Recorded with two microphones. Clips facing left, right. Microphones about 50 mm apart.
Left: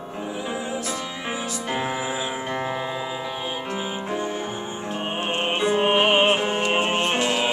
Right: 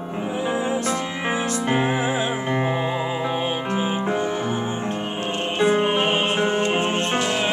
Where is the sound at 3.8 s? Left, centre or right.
Centre.